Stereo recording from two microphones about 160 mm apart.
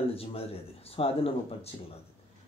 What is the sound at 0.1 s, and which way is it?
Speech, 35° left (ahead or behind).